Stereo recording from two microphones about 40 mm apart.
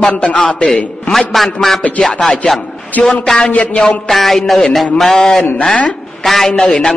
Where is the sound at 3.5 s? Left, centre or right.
Left.